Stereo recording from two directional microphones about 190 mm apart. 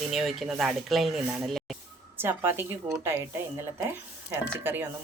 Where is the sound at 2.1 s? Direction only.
10° right (ahead or behind).